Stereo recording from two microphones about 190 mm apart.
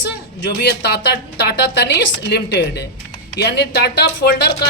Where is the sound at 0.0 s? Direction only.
65° left (ahead or behind).